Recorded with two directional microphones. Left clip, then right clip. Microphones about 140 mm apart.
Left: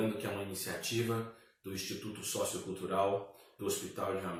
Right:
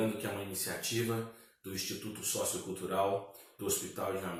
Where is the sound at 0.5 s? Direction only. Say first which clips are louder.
Right 1 dB; centre (ahead or behind).